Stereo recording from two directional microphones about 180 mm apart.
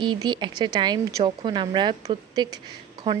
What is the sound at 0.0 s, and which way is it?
A woman's voice, 25° right (ahead or behind).